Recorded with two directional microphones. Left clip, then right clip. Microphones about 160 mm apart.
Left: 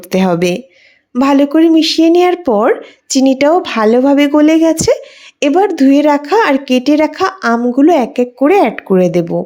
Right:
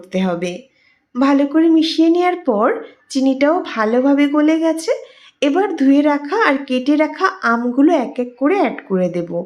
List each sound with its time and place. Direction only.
0.1 s speech: 65° left (ahead or behind)
1.2 s a woman's voice: 45° left (ahead or behind)